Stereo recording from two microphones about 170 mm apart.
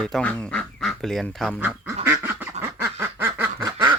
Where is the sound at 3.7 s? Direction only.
30° right (ahead or behind).